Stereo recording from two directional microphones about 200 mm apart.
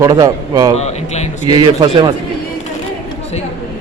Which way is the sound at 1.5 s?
25° right (ahead or behind).